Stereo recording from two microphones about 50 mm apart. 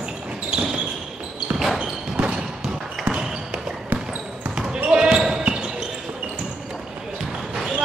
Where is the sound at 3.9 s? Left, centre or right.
Right.